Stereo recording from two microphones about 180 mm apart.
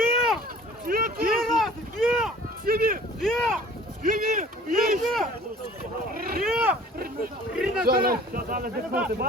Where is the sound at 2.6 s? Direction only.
55° right (ahead or behind).